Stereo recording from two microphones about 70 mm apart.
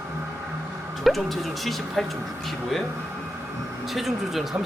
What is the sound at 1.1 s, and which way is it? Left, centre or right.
Speech, centre.